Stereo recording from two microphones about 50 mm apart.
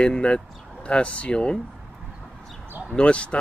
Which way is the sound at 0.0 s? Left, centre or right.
Centre.